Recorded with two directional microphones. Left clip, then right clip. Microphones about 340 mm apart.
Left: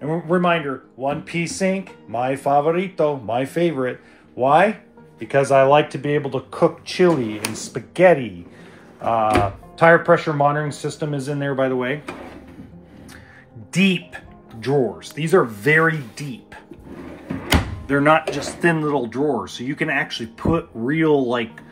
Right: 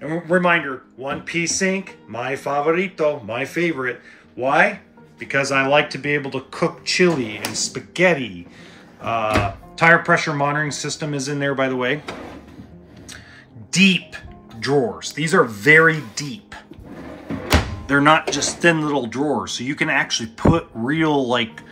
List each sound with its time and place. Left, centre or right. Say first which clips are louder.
0.4 s speech: right 4 dB; centre
13.7 s speech: right 4 dB; centre
17.8 s speech: right 1 dB; centre